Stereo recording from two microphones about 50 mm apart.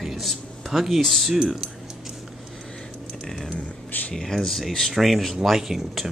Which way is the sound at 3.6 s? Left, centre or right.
Left.